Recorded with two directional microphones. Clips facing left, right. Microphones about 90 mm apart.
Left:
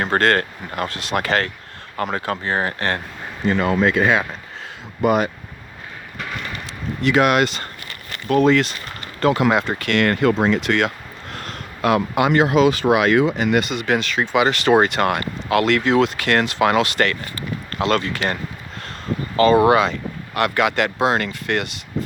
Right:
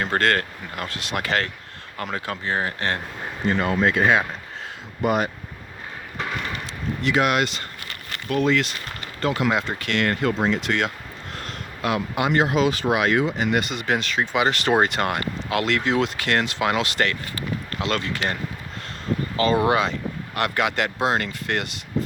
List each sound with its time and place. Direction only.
0.0 s speech: 35° left (ahead or behind); by 3.0 s 55° left (ahead or behind)
5.0 s speech: 90° left
7.0 s speech: 60° left (ahead or behind); by 8.7 s 40° left (ahead or behind)
9.2 s speech: 60° left (ahead or behind)
19.4 s speech: 65° left (ahead or behind)
20.3 s speech: 90° left